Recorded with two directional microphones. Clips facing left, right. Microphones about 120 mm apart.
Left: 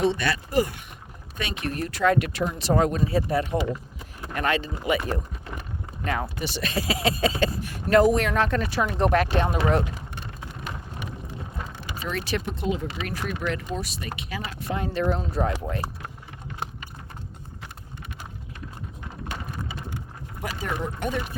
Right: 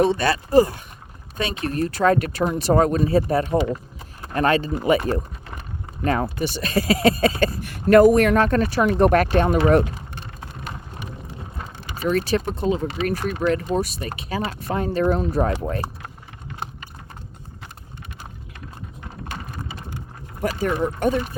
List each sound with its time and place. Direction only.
0.0 s speech: 40° right (ahead or behind)
4.2 s speech: 35° right (ahead or behind)
8.8 s speech: 60° right (ahead or behind)
11.6 s speech: 45° right (ahead or behind)
20.4 s speech: 50° right (ahead or behind)